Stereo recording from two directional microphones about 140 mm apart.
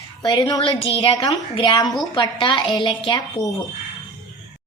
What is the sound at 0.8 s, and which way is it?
Speech, 40° left (ahead or behind).